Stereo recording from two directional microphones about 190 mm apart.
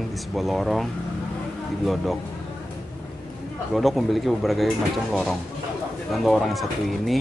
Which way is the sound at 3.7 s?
Centre (ahead or behind).